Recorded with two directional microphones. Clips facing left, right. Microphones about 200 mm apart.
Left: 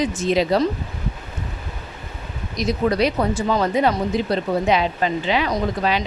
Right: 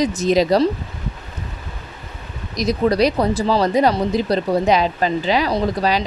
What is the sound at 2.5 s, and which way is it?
Speech, 35° right (ahead or behind).